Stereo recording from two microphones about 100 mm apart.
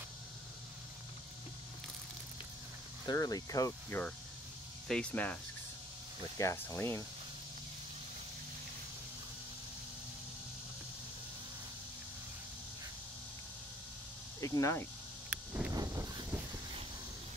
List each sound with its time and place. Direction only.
3.1 s speech: 40° left (ahead or behind)
3.9 s speech: 20° left (ahead or behind)
4.8 s speech: 10° left (ahead or behind)
6.3 s speech: 30° left (ahead or behind)
14.4 s speech: 30° left (ahead or behind)
15.2 s vehicle: 10° right (ahead or behind)